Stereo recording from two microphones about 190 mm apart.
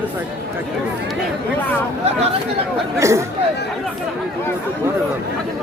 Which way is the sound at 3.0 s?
15° right (ahead or behind).